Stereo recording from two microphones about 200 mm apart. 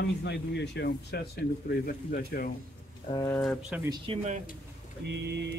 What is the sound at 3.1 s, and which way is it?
Speech, 15° left (ahead or behind).